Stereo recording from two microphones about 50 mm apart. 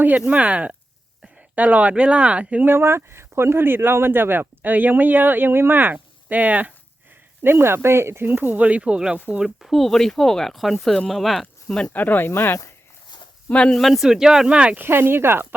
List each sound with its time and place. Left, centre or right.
0.3 s speech: right
2.6 s speech: right
7.4 s speech: right
8.4 s speech: right
9.4 s speech: centre
11.9 s speech: left
12.3 s speech: left
13.5 s speech: left
13.7 s speech: centre
14.1 s speech: centre
14.8 s speech: right